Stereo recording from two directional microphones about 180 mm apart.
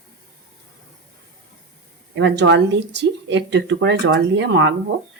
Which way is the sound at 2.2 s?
80° right.